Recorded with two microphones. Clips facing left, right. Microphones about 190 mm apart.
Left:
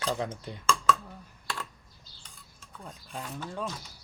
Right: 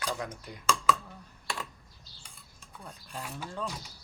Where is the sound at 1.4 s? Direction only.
10° right (ahead or behind).